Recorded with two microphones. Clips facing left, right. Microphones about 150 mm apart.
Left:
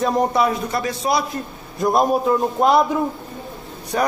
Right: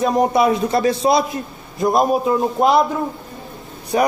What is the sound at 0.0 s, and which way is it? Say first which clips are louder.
Speech: right 2 dB; 5° right (ahead or behind).